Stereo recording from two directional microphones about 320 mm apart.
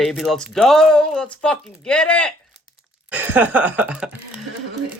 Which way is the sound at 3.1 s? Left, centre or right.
Centre.